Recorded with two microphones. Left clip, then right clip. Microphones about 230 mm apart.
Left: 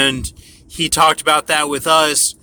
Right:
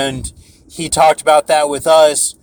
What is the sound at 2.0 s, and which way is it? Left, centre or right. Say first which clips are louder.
Speech: right 5 dB; centre.